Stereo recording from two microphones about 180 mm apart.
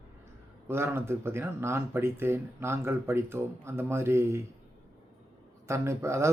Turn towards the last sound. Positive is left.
turn(degrees=-15)  # may be behind; listen again after turning